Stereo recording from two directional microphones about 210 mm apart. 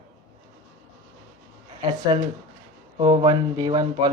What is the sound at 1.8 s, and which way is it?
Speech, 20° right (ahead or behind).